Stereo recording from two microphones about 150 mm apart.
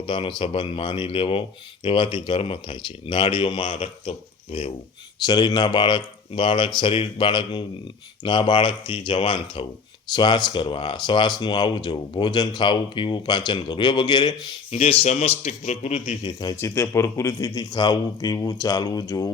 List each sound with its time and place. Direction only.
0.0 s speech: 35° left (ahead or behind)
5.2 s speech: 30° left (ahead or behind)
14.7 s a man's voice: 45° left (ahead or behind)
16.2 s a man's voice: 30° left (ahead or behind)